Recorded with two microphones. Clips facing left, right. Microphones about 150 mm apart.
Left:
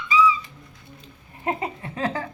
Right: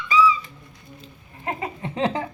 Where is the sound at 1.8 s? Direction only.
20° right (ahead or behind).